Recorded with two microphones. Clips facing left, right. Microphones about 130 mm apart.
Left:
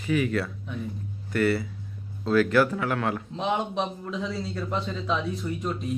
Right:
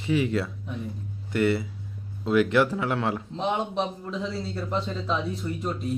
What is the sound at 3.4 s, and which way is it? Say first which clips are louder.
A man's voice: even; centre (ahead or behind).